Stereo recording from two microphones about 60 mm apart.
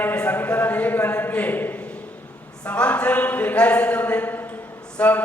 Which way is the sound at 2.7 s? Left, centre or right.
Left.